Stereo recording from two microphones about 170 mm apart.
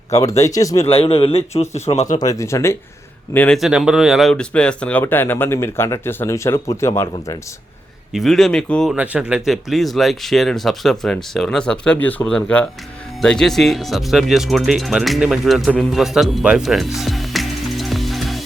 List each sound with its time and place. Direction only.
0.1 s speech: 20° left (ahead or behind)
0.9 s a man's voice: 35° left (ahead or behind)
2.1 s speech: 20° left (ahead or behind)
3.6 s speech: 5° right (ahead or behind); by 7.3 s 15° left (ahead or behind)
8.1 s speech: centre (ahead or behind)